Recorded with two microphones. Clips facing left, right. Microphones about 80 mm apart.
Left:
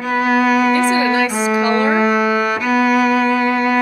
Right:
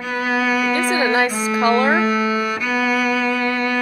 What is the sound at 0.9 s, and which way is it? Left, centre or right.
Music, right.